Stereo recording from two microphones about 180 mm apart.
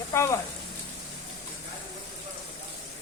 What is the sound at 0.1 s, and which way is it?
Speech, 15° left (ahead or behind).